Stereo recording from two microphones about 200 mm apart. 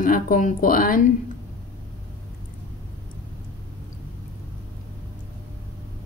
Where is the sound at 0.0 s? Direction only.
45° left (ahead or behind).